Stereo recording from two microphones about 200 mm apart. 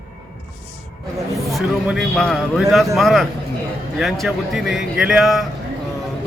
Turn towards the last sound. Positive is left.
turn(degrees=0)  # may be behind; listen again after turning